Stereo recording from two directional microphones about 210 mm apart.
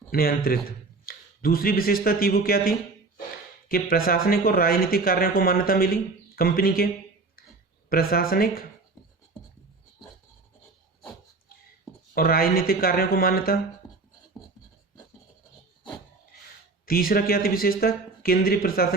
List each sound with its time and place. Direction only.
0.1 s speech: 45° left (ahead or behind)
12.1 s speech: 45° left (ahead or behind)
16.8 s speech: 45° left (ahead or behind)